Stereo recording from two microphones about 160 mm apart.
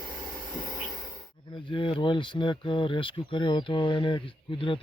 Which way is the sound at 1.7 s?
30° left (ahead or behind).